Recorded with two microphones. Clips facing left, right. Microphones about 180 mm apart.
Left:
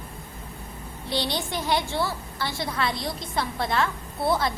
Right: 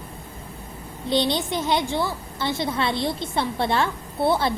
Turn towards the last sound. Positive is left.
turn(degrees=-25)  # may be behind; listen again after turning